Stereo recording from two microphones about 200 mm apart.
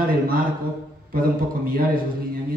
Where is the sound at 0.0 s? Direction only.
45° right (ahead or behind).